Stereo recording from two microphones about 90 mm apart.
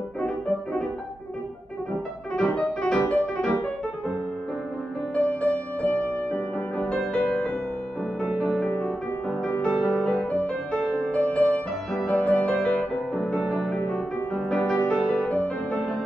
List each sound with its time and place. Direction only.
2.3 s music: 10° left (ahead or behind)
5.1 s music: 15° left (ahead or behind)
11.9 s music: centre (ahead or behind)
12.2 s music: 15° left (ahead or behind)